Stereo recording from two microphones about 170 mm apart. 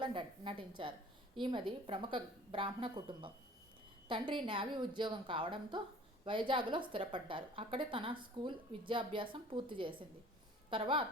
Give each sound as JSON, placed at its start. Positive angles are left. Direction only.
{"t": 0.0, "sound": "a woman's voice", "side_deg": -30}